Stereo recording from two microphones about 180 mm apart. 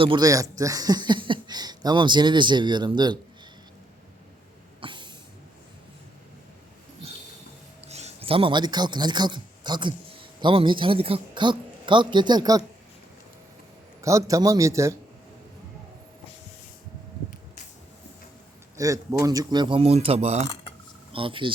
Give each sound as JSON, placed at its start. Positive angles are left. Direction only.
{"t": 0.0, "sound": "speech", "side_deg": -25}
{"t": 4.8, "sound": "a sound", "side_deg": -25}
{"t": 7.9, "sound": "a man's voice", "side_deg": -35}
{"t": 14.0, "sound": "a man's voice", "side_deg": -15}
{"t": 18.8, "sound": "speech", "side_deg": -20}